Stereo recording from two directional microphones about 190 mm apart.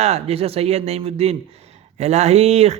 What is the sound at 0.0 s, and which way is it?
A man's voice, 35° right (ahead or behind).